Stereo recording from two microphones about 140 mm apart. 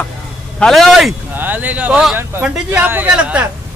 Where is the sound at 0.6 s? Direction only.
Centre (ahead or behind).